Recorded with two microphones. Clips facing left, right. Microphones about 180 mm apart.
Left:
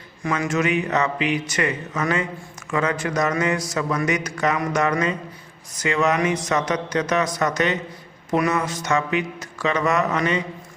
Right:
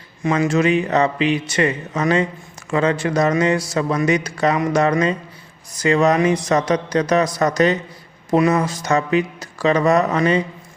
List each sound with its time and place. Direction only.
0.2 s a man's voice: 25° right (ahead or behind)